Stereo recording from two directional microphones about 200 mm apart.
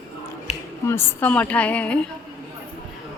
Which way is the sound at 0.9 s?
10° left (ahead or behind).